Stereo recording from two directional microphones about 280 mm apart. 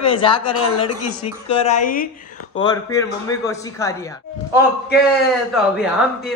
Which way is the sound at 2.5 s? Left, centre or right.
Centre.